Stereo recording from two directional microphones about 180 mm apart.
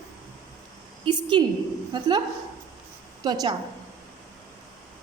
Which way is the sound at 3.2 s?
25° right (ahead or behind).